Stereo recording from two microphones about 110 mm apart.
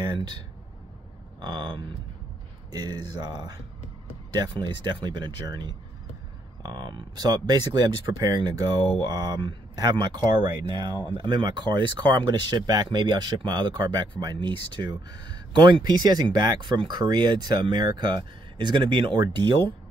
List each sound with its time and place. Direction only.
1.4 s speech: 45° right (ahead or behind)